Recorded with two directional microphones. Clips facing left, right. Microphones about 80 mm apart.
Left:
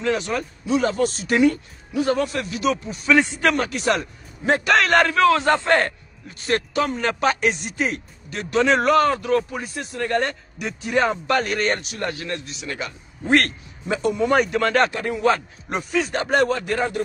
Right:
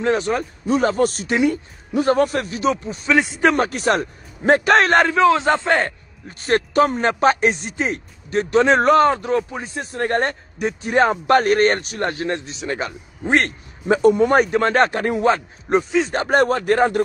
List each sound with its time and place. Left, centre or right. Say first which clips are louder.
0.0 s speech: right 4 dB; right
1.2 s a man's voice: left 1 dB; centre
1.9 s a man's voice: right 4 dB; right; by 5.9 s centre
6.2 s speech: right 4 dB; right
13.2 s a man's voice: even; right
13.8 s speech: right 6 dB; right
14.9 s speech: right 5 dB; right
15.2 s a man's voice: right 2 dB; right
16.1 s speech: right 1 dB; right